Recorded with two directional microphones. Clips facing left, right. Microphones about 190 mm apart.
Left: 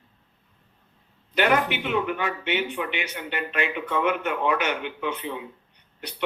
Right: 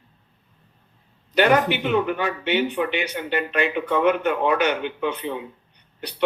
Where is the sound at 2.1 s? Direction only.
35° right (ahead or behind).